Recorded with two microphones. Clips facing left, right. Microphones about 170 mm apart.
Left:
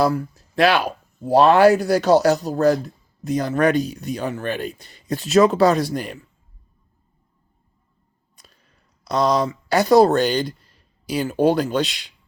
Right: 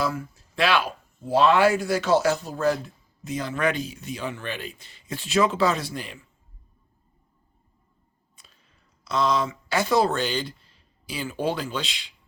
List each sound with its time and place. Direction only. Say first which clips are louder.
0.0 s speech: left 8 dB; 35° left (ahead or behind)
9.0 s speech: left 5 dB; 40° left (ahead or behind)